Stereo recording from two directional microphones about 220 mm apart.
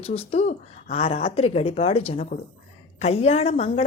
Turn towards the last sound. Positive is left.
turn(degrees=30)  # may be behind; listen again after turning